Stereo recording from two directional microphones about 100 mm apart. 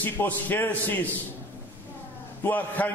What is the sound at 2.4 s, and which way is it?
Speech, 15° left (ahead or behind).